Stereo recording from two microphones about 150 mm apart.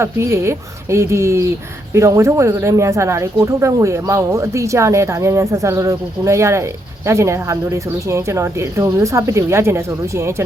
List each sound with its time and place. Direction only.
0.0 s speech: 20° right (ahead or behind)